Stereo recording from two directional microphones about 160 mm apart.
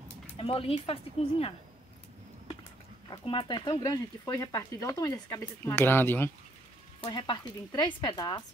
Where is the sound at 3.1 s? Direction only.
30° left (ahead or behind); by 6.3 s 15° left (ahead or behind).